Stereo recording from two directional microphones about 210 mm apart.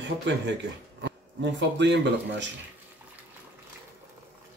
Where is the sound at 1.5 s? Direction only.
55° right (ahead or behind).